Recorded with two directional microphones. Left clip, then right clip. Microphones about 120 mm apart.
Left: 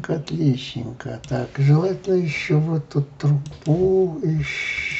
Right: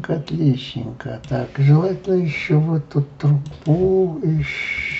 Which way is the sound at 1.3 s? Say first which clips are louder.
Right 2 dB; 10° left (ahead or behind).